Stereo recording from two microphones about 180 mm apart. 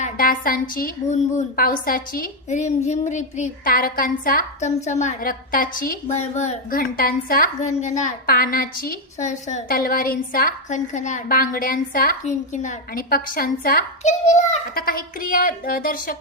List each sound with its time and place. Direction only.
0.0 s a woman's voice: 50° left (ahead or behind)
4.7 s a woman's voice: 40° left (ahead or behind)
6.1 s a woman's voice: 40° left (ahead or behind)
6.7 s a woman's voice: 55° left (ahead or behind)
14.0 s a woman's voice: 40° left (ahead or behind)
14.8 s a woman's voice: 55° left (ahead or behind)